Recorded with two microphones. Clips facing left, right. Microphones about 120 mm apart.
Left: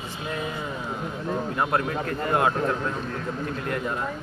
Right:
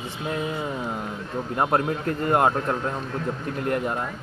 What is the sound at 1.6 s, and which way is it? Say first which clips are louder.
Speech: right 5 dB; 30° right (ahead or behind).